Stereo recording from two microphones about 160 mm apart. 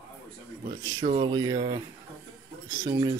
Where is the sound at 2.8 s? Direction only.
35° right (ahead or behind).